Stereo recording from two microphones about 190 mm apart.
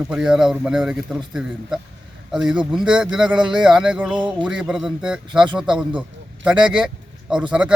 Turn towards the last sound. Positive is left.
turn(degrees=-5)  # may be behind; listen again after turning